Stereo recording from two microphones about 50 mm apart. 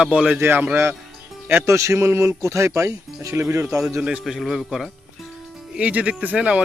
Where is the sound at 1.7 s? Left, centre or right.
Right.